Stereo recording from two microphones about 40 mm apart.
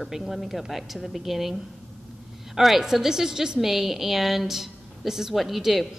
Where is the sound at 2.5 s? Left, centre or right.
Centre.